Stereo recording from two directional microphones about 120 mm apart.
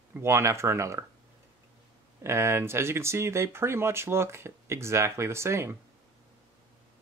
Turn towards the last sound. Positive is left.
turn(degrees=-20)  # may be behind; listen again after turning